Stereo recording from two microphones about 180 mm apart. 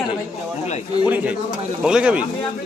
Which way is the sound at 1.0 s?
10° right (ahead or behind).